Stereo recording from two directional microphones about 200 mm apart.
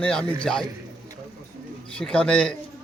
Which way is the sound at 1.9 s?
5° left (ahead or behind).